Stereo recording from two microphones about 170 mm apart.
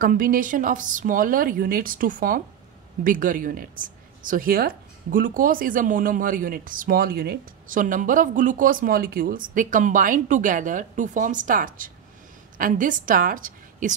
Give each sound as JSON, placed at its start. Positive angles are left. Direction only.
{"t": 0.0, "sound": "a woman's voice", "side_deg": -55}